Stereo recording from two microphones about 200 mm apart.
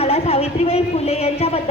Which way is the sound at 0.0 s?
30° left (ahead or behind).